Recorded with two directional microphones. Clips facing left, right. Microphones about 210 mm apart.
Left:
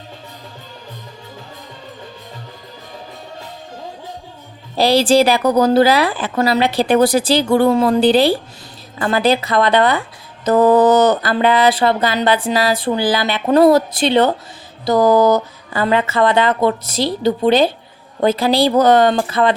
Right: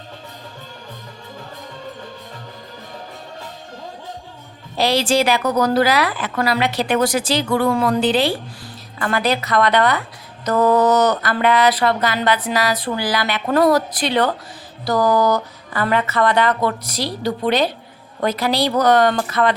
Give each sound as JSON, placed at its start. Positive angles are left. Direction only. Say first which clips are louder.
{"t": 4.8, "sound": "speech", "louder": "left 5 dB", "side_deg": 35}